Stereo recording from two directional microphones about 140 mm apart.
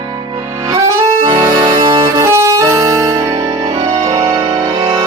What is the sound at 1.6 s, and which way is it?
Music, 30° right (ahead or behind).